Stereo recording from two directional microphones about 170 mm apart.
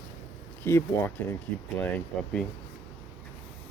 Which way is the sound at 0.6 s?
15° left (ahead or behind).